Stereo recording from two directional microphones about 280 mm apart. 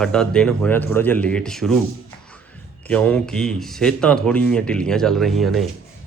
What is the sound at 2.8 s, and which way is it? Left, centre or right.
Speech, centre.